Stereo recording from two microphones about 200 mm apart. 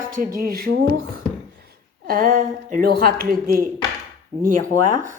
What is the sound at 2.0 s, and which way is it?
A woman's voice, 45° right (ahead or behind).